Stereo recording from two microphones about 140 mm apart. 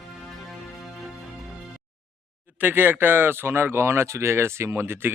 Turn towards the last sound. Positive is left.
turn(degrees=-15)  # may be behind; listen again after turning